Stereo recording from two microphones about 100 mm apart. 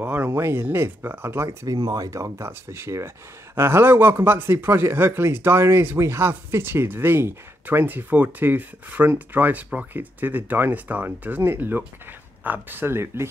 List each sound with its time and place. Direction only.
0.0 s speech: 20° right (ahead or behind)
1.8 s speech: 40° right (ahead or behind)